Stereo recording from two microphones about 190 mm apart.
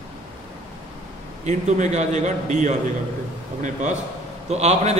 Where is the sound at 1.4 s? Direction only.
40° right (ahead or behind).